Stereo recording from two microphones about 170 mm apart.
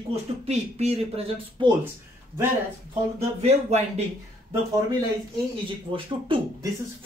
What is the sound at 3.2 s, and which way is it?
Speech, 40° right (ahead or behind).